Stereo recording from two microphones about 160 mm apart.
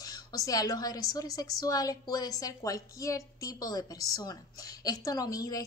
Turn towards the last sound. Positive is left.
turn(degrees=20)  # may be behind; listen again after turning